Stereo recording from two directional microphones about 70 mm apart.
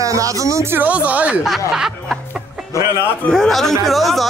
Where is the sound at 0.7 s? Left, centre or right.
Right.